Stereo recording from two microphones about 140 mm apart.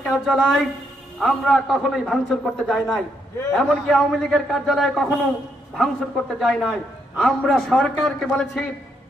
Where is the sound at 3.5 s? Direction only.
5° left (ahead or behind).